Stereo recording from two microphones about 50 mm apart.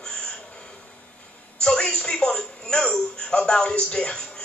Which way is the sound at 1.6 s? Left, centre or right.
Centre.